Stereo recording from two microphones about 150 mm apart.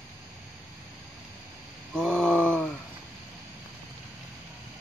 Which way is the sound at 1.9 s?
5° left (ahead or behind).